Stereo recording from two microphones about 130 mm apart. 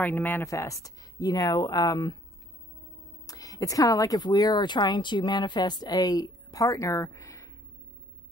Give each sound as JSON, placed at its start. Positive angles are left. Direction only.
{"t": 0.0, "sound": "speech", "side_deg": 15}
{"t": 0.5, "sound": "speech", "side_deg": 25}
{"t": 3.3, "sound": "speech", "side_deg": 25}